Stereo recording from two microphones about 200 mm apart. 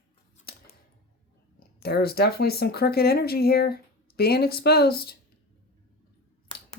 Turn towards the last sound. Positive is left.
turn(degrees=50)  # may be behind; listen again after turning